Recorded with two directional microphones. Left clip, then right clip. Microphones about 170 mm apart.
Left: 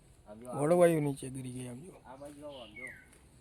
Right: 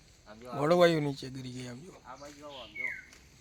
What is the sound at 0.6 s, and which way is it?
Speech, centre (ahead or behind).